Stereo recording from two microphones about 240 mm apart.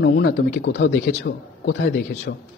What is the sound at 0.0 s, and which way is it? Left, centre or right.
Speech, left.